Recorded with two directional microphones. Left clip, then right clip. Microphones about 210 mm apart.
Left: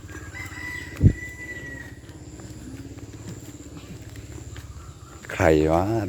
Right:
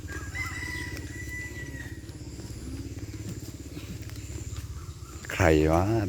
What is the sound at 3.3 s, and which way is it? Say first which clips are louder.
Vehicle: left 1 dB; 5° left (ahead or behind).